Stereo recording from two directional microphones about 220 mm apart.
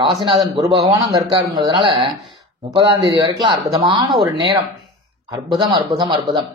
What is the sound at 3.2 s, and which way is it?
Speech, 20° right (ahead or behind).